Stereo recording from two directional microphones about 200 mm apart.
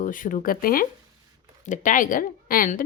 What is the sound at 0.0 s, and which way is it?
A woman's voice, 40° left (ahead or behind).